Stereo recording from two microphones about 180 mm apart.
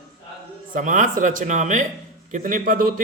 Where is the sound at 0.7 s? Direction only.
45° right (ahead or behind).